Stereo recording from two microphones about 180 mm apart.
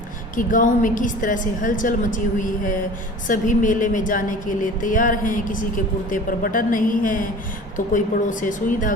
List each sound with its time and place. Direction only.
0.3 s a woman's voice: 45° left (ahead or behind)